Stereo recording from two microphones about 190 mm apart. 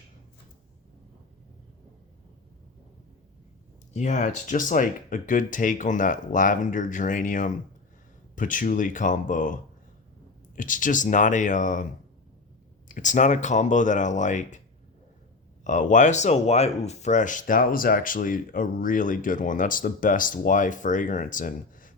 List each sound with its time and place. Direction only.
3.9 s speech: 40° left (ahead or behind)
12.9 s speech: 40° left (ahead or behind)
15.6 s speech: 40° left (ahead or behind)